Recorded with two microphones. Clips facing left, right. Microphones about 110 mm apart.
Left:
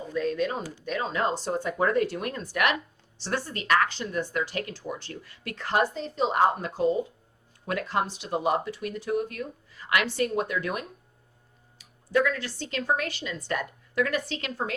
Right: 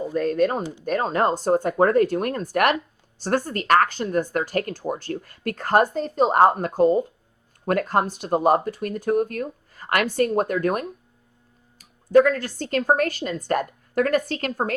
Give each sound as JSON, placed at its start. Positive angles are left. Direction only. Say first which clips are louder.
{"t": 0.1, "sound": "speech", "louder": "right 5 dB", "side_deg": -50}
{"t": 0.6, "sound": "speech", "louder": "right 7 dB", "side_deg": -20}
{"t": 0.9, "sound": "speech", "louder": "right 6 dB", "side_deg": -45}
{"t": 12.1, "sound": "speech", "louder": "right 9 dB", "side_deg": -45}